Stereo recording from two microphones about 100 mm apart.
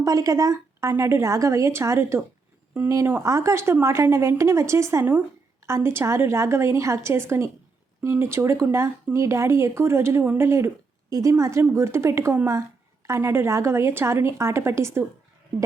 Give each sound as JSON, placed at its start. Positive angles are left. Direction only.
{"t": 0.0, "sound": "speech", "side_deg": -35}